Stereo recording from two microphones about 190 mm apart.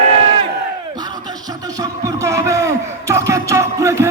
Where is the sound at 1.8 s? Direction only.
15° right (ahead or behind).